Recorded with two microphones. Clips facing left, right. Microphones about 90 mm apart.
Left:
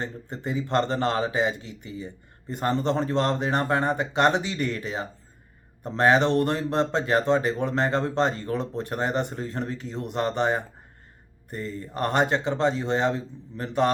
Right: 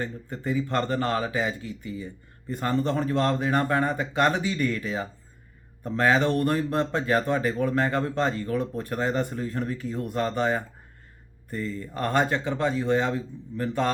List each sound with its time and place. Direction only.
0.0 s speech: 25° left (ahead or behind)